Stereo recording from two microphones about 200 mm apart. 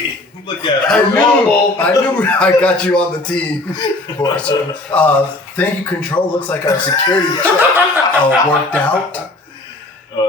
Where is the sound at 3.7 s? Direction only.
20° left (ahead or behind).